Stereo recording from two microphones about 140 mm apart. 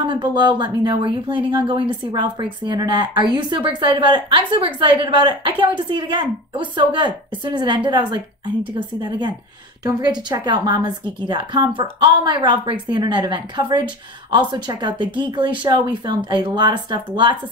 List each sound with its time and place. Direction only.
0.1 s speech: 30° right (ahead or behind)
9.8 s speech: 30° right (ahead or behind)